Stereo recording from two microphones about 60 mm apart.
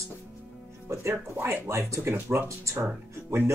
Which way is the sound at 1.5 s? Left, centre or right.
Right.